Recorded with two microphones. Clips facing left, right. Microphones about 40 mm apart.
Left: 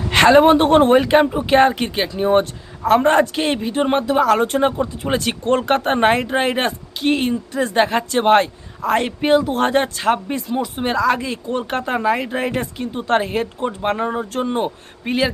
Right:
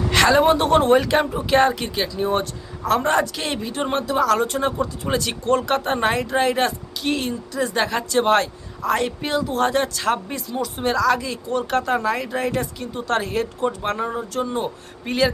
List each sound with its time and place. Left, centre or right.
0.1 s speech: left
15.0 s speech: left